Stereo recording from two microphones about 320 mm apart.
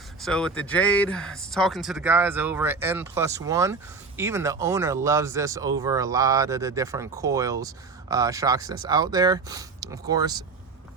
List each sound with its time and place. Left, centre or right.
0.2 s speech: centre